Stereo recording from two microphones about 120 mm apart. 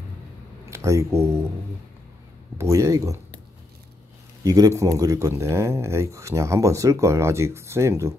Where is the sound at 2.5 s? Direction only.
25° right (ahead or behind).